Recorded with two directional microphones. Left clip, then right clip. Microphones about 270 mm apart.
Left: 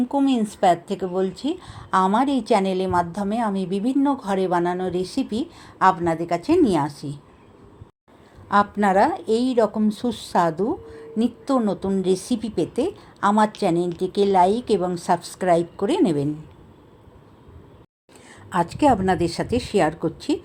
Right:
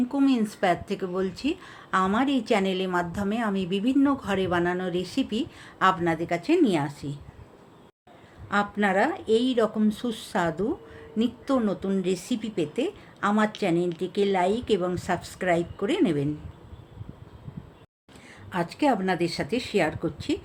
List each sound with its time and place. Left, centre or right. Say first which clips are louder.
0.1 s a woman's voice: left 3 dB; centre
8.4 s a woman's voice: left 6 dB; centre
18.5 s a woman's voice: left 6 dB; centre